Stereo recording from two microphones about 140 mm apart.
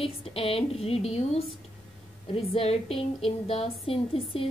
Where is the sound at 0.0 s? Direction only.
45° left (ahead or behind).